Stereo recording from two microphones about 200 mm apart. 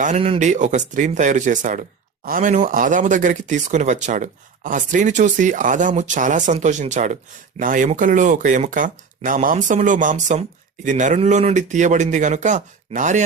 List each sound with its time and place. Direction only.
0.0 s speech: 35° right (ahead or behind)